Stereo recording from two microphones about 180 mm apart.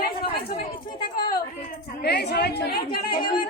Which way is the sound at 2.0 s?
65° left (ahead or behind).